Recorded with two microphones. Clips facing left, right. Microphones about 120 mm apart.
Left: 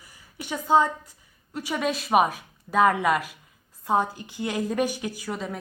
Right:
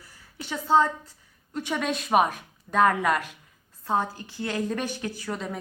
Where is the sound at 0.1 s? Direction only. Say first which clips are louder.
Left 2 dB; 15° left (ahead or behind).